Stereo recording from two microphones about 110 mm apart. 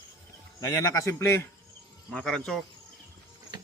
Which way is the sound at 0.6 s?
25° left (ahead or behind).